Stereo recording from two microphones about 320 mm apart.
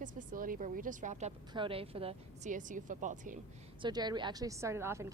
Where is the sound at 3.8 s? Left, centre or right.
Centre.